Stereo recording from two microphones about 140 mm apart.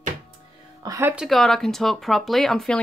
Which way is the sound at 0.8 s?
25° right (ahead or behind).